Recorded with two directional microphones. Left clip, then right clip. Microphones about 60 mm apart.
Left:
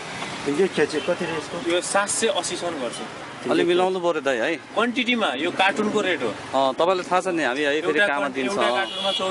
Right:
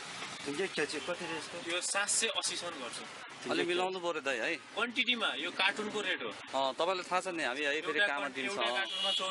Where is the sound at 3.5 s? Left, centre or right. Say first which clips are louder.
Left 13 dB; centre.